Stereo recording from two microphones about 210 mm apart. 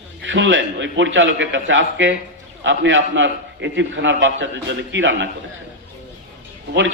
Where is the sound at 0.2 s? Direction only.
65° right (ahead or behind).